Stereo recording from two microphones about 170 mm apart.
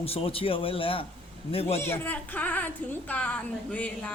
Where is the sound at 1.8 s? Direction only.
10° left (ahead or behind).